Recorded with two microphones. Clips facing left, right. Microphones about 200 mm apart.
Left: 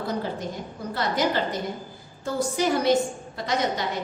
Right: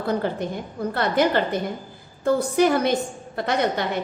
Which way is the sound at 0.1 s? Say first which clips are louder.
Right 8 dB; 60° right (ahead or behind).